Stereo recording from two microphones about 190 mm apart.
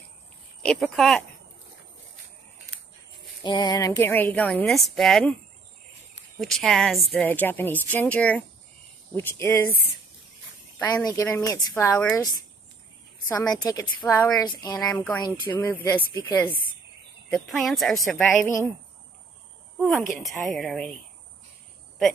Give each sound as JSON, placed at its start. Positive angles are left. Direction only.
{"t": 0.6, "sound": "a woman's voice", "side_deg": 5}
{"t": 3.4, "sound": "a woman's voice", "side_deg": 20}
{"t": 6.4, "sound": "a woman's voice", "side_deg": 0}
{"t": 10.8, "sound": "a woman's voice", "side_deg": 15}
{"t": 13.3, "sound": "a woman's voice", "side_deg": 15}
{"t": 19.8, "sound": "a woman's voice", "side_deg": 0}